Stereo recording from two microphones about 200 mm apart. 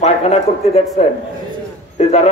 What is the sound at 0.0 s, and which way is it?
A man's voice, 30° left (ahead or behind).